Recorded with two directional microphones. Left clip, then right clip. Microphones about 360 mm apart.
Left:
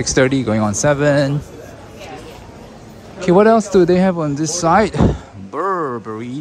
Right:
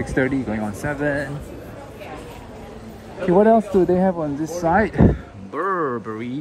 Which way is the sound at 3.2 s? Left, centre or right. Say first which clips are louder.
Left 4 dB; right.